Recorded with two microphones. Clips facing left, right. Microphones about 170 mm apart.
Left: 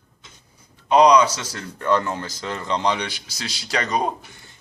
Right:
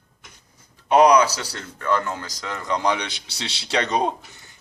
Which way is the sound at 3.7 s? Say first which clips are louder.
Right 1 dB; 30° right (ahead or behind).